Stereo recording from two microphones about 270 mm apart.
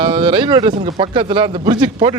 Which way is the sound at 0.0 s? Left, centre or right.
Centre.